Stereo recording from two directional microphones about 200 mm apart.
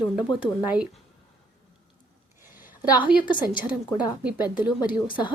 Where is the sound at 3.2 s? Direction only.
20° left (ahead or behind).